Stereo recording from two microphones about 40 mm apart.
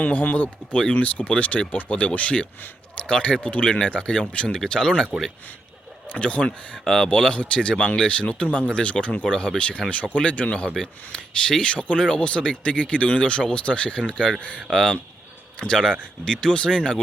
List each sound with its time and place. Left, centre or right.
0.0 s speech: left
4.5 s speech: centre
6.1 s speech: left
6.8 s speech: centre; by 9.2 s left
9.2 s speech: centre
14.0 s speech: centre
15.5 s speech: left